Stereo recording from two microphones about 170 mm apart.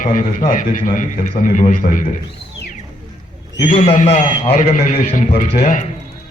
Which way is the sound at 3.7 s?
45° left (ahead or behind).